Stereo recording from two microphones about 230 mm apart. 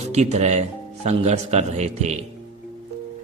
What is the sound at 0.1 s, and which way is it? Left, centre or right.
A man's voice, right.